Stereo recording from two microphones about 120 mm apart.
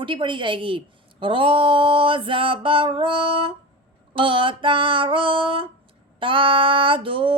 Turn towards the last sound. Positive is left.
turn(degrees=-45)  # may be behind; listen again after turning